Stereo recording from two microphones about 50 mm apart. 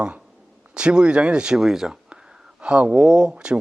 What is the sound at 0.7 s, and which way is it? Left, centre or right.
Speech, centre.